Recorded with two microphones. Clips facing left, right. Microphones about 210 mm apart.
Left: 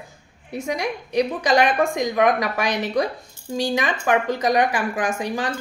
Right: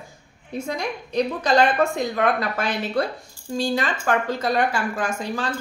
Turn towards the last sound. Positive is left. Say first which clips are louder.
# left 2 dB
turn(degrees=15)  # may be behind; listen again after turning